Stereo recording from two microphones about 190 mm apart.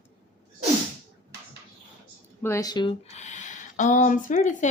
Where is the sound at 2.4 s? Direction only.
15° left (ahead or behind).